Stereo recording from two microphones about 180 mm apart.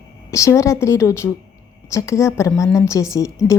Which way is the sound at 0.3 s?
15° left (ahead or behind).